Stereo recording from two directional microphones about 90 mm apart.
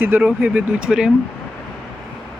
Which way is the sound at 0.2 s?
15° right (ahead or behind).